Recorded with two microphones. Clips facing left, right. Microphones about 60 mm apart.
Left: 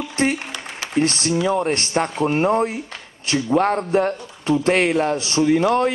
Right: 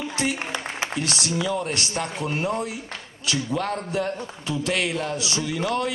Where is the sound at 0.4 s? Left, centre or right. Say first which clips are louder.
Right 2 dB; right.